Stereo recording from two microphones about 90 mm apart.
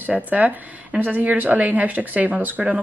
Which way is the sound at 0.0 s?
20° right (ahead or behind).